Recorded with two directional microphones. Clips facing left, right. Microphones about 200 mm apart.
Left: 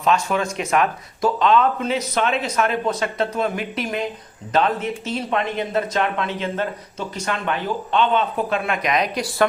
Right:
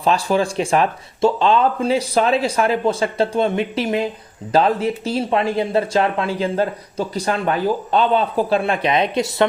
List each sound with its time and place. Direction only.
0.0 s speech: 35° right (ahead or behind)